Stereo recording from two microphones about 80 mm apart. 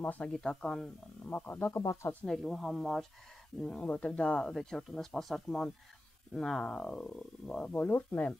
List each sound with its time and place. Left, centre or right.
0.0 s speech: left
0.3 s speech: centre; by 1.8 s left
1.8 s speech: left
2.2 s speech: centre
3.6 s speech: centre
7.7 s speech: left